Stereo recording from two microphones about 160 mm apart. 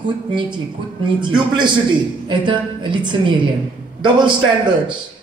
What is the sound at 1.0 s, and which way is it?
A man's voice, 30° right (ahead or behind).